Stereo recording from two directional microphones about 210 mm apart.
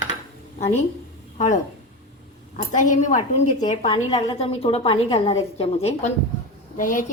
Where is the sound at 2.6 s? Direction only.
35° left (ahead or behind).